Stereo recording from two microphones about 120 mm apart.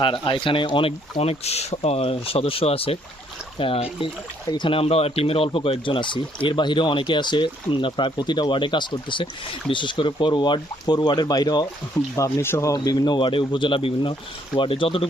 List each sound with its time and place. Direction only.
0.0 s speech: 45° left (ahead or behind)
12.1 s speech: 25° left (ahead or behind); by 15.0 s 50° left (ahead or behind)